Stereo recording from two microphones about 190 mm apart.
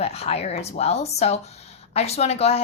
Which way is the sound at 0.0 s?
35° left (ahead or behind).